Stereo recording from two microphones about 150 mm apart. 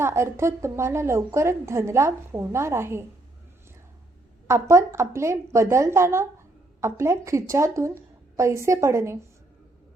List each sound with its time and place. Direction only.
0.0 s a woman's voice: 15° right (ahead or behind)
4.4 s a woman's voice: 20° right (ahead or behind)